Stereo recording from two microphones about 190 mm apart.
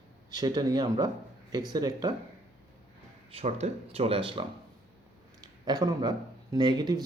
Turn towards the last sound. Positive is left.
turn(degrees=-20)  # may be behind; listen again after turning